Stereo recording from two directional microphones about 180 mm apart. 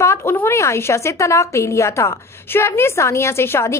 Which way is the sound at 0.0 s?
15° left (ahead or behind).